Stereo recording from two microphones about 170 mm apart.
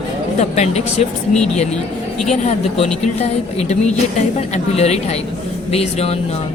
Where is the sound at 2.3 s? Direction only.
40° left (ahead or behind).